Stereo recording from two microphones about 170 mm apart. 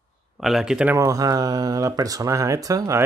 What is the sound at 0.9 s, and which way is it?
Speech, 20° right (ahead or behind).